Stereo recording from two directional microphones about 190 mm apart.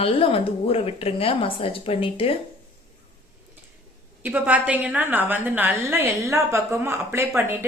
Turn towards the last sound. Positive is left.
turn(degrees=-10)  # may be behind; listen again after turning